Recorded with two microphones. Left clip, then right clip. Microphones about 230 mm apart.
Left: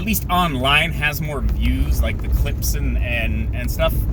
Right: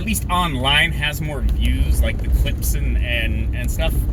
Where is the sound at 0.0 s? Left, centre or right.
Left.